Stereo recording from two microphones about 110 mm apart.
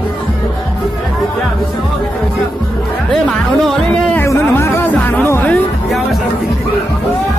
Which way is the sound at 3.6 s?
Centre (ahead or behind).